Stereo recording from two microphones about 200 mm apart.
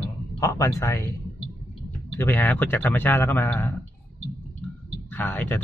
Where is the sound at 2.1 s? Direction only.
10° left (ahead or behind).